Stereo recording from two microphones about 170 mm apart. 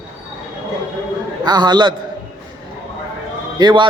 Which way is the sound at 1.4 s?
25° right (ahead or behind).